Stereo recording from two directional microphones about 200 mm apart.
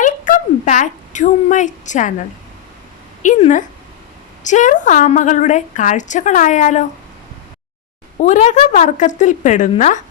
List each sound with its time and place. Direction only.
0.0 s a sound: 40° left (ahead or behind)
3.2 s a woman's voice: 35° left (ahead or behind)
8.2 s a woman's voice: 35° left (ahead or behind)